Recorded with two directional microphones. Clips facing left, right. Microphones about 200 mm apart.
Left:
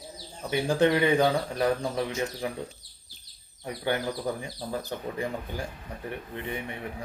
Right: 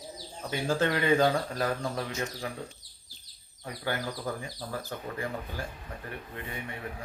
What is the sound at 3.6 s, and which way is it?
Speech, 20° left (ahead or behind).